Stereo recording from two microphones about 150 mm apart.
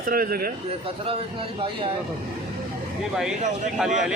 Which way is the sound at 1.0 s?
40° right (ahead or behind).